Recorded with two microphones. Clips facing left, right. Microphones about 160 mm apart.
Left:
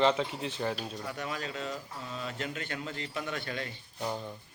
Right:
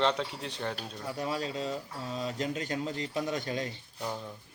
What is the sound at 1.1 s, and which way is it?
Speech, 35° right (ahead or behind).